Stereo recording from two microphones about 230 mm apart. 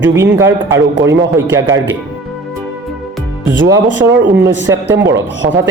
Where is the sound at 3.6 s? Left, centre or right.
Centre.